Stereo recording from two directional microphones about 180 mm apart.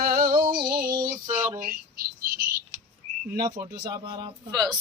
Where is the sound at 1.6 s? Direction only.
55° right (ahead or behind).